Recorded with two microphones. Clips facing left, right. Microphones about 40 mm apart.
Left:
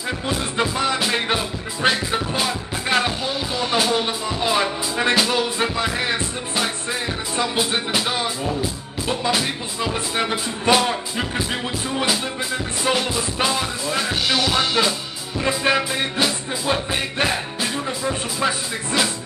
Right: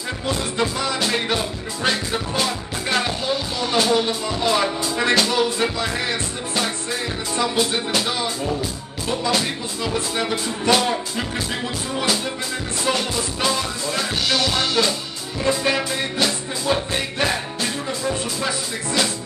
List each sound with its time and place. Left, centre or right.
0.3 s music: left
9.3 s music: centre
12.8 s music: centre
15.4 s music: left